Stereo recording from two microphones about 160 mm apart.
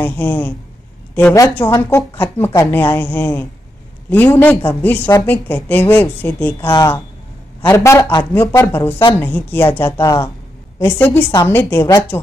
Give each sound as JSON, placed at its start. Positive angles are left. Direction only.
{"t": 0.0, "sound": "a woman's voice", "side_deg": 10}